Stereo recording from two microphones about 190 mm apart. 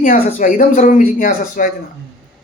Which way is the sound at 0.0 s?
45° left (ahead or behind).